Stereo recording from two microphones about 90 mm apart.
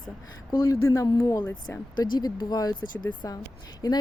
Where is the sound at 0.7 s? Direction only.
35° left (ahead or behind).